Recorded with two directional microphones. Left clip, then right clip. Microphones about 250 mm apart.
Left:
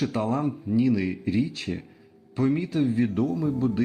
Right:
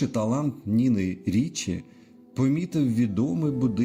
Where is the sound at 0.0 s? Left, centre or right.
Right.